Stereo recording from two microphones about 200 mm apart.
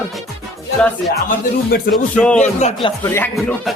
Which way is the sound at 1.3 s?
45° left (ahead or behind).